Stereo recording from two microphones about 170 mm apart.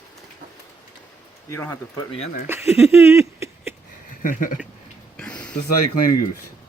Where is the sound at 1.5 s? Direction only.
15° left (ahead or behind).